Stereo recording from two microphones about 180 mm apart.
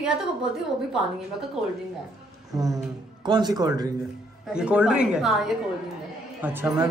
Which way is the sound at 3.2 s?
25° right (ahead or behind).